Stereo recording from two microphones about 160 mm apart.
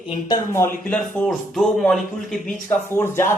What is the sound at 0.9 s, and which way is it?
A man's voice, 5° left (ahead or behind).